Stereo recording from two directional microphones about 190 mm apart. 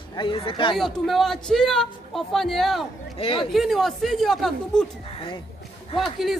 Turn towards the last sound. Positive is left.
turn(degrees=0)  # may be behind; listen again after turning